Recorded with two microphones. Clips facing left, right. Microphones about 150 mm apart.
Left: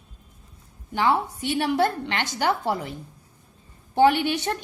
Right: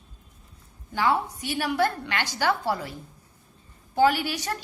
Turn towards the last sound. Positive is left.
turn(degrees=25)  # may be behind; listen again after turning